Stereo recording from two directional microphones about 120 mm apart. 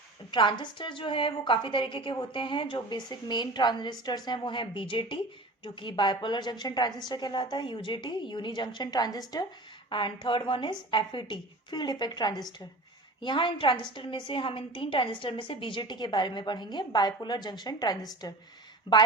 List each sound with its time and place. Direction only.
0.3 s a woman's voice: 40° left (ahead or behind)
10.2 s a woman's voice: 45° left (ahead or behind)